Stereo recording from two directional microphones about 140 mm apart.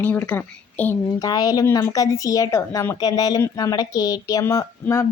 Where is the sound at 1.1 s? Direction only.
25° left (ahead or behind).